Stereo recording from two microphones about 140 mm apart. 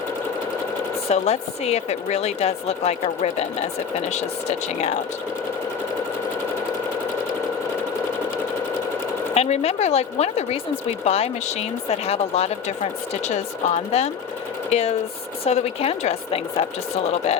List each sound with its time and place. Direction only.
1.0 s speech: 45° left (ahead or behind)
9.3 s speech: 45° left (ahead or behind)